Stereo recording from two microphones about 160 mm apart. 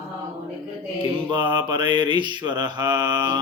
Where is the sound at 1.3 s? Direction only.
30° right (ahead or behind).